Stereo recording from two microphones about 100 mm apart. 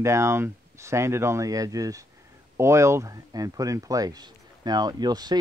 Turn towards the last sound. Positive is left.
turn(degrees=-45)  # may be behind; listen again after turning